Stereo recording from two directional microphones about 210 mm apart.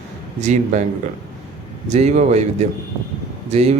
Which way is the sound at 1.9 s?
30° right (ahead or behind).